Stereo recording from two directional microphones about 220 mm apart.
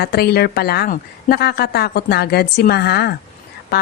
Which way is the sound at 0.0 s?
45° left (ahead or behind).